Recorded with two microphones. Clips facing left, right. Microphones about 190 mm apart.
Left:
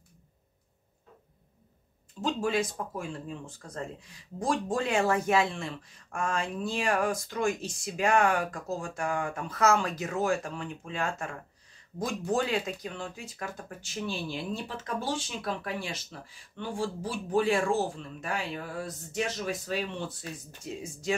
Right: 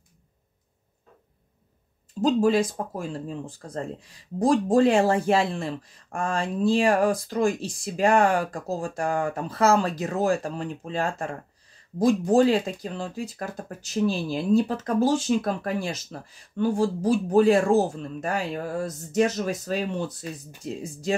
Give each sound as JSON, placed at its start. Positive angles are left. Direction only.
{"t": 2.2, "sound": "speech", "side_deg": -35}